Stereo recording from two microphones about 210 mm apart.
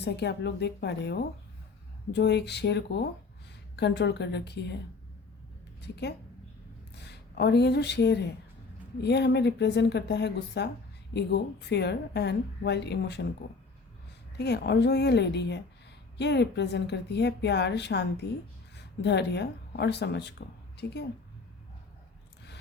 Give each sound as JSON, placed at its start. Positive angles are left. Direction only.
{"t": 0.0, "sound": "speech", "side_deg": 55}
{"t": 5.8, "sound": "a woman's voice", "side_deg": 55}
{"t": 14.3, "sound": "speech", "side_deg": 50}